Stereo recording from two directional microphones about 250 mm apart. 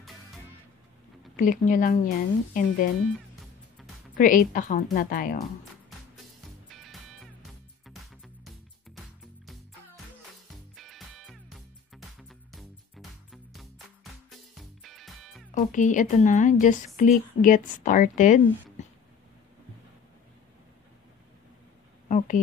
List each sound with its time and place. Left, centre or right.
1.3 s a woman's voice: left
4.2 s a woman's voice: left
6.7 s music: centre
10.5 s music: centre
15.5 s a woman's voice: left
22.0 s a sound: left